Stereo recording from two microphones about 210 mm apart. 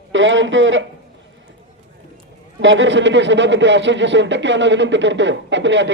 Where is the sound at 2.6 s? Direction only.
60° right (ahead or behind).